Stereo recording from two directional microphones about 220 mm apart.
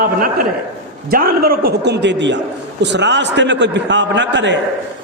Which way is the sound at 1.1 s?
40° right (ahead or behind).